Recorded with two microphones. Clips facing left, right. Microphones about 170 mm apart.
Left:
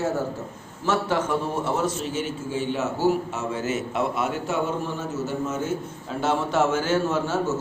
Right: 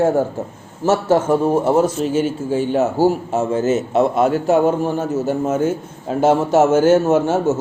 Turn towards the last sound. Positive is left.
turn(degrees=-50)  # may be behind; listen again after turning